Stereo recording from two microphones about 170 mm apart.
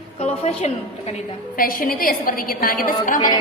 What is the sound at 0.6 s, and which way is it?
Speech, 40° left (ahead or behind).